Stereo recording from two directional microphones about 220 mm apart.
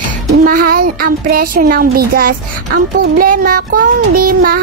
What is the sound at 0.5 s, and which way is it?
Speech, 40° right (ahead or behind).